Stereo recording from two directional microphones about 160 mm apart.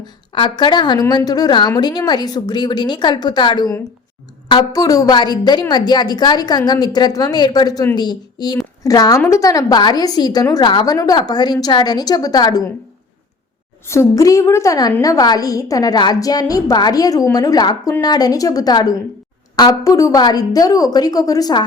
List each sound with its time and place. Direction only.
0.3 s a woman's voice: 30° left (ahead or behind)
13.8 s a woman's voice: 15° left (ahead or behind)